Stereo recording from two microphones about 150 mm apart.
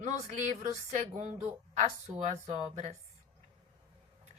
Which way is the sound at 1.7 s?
50° right (ahead or behind).